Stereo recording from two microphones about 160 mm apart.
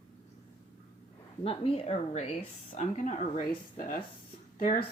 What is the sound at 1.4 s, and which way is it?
Speech, 35° left (ahead or behind).